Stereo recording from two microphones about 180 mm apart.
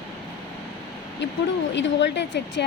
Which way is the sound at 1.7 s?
85° left.